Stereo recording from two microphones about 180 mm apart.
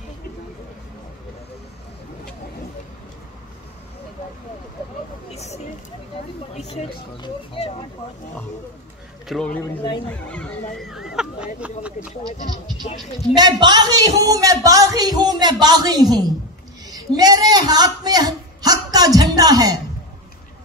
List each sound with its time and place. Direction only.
5.3 s a sound: 35° left (ahead or behind)
6.5 s speech: 35° left (ahead or behind)
9.3 s speech: 5° left (ahead or behind)
12.9 s speech: 35° left (ahead or behind)
13.4 s speech: 25° right (ahead or behind)
16.8 s a sound: 20° right (ahead or behind)